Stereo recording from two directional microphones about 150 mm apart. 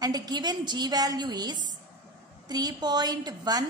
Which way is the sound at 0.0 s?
25° right (ahead or behind).